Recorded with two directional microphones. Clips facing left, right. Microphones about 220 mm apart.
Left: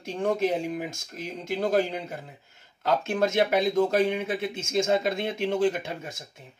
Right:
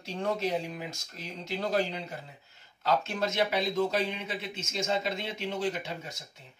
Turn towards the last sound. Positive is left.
turn(degrees=50)  # may be behind; listen again after turning